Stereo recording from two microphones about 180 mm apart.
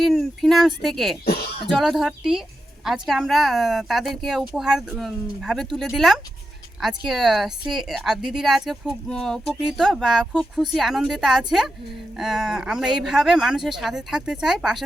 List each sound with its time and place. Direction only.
0.0 s speech: centre (ahead or behind)
1.2 s speech: 55° left (ahead or behind)
1.7 s speech: centre (ahead or behind)